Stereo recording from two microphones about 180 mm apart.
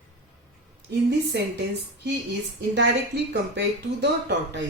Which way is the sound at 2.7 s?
70° right (ahead or behind).